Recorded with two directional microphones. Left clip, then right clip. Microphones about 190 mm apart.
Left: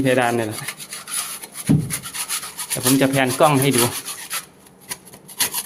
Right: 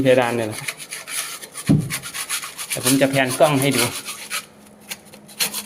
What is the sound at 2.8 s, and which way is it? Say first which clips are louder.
Speech: even; 15° left (ahead or behind).